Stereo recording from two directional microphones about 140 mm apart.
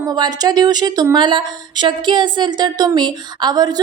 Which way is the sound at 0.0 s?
25° right (ahead or behind).